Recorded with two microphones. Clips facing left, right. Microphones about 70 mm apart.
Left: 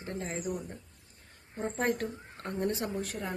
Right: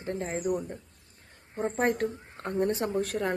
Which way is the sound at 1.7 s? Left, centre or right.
Right.